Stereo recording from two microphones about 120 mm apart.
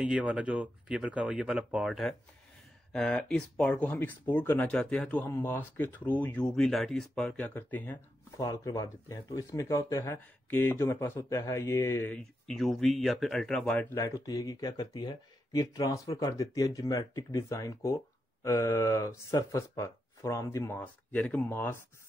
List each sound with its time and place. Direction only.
0.0 s speech: 10° right (ahead or behind); by 8.0 s 15° left (ahead or behind)
8.4 s speech: 30° left (ahead or behind)
12.1 s speech: 5° left (ahead or behind)